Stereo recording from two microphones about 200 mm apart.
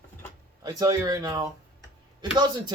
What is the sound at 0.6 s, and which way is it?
Speech, 20° right (ahead or behind).